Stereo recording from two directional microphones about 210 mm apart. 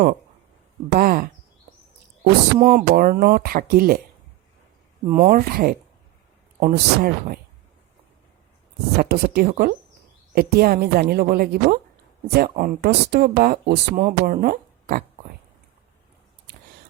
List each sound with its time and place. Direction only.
0.9 s speech: 45° right (ahead or behind)
2.6 s speech: 45° right (ahead or behind)
5.1 s speech: 40° right (ahead or behind)
9.0 s speech: 45° right (ahead or behind)